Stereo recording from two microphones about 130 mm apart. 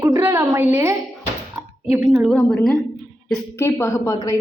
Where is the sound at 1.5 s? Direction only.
20° right (ahead or behind).